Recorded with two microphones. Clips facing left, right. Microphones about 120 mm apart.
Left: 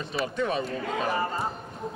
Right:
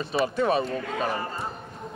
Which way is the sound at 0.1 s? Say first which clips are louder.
Right 5 dB; 30° right (ahead or behind).